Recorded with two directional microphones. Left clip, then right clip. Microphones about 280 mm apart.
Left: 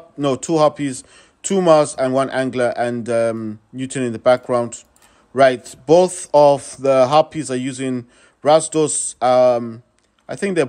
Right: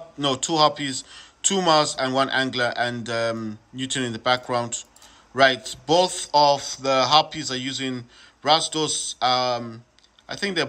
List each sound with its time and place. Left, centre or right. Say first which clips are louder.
0.2 s speech: left 4 dB; centre